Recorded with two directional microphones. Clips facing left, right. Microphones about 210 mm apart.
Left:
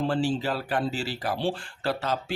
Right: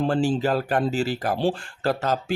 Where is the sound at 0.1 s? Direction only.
45° right (ahead or behind).